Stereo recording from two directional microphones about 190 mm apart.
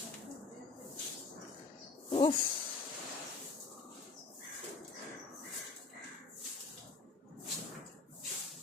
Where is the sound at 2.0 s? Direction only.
30° left (ahead or behind).